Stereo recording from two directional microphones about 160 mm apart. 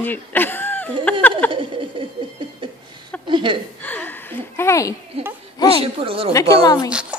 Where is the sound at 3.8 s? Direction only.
10° left (ahead or behind).